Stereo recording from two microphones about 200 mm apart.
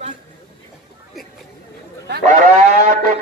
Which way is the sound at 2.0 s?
50° right (ahead or behind).